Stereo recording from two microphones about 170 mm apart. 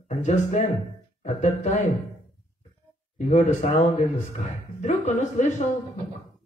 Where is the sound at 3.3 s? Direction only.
40° left (ahead or behind).